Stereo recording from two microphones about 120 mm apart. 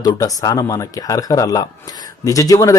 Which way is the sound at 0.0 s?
30° left (ahead or behind).